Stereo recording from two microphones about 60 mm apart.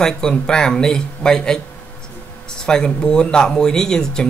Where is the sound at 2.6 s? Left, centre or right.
Centre.